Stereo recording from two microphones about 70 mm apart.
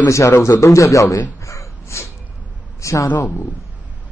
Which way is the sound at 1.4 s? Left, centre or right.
Left.